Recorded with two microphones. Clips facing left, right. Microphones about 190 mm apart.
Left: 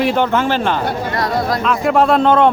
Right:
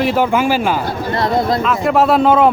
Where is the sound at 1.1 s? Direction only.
25° right (ahead or behind).